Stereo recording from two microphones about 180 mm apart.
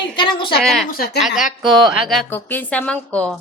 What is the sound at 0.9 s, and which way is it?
Speech, 55° left (ahead or behind).